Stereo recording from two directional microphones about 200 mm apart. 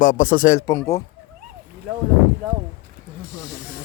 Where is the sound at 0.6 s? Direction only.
20° left (ahead or behind).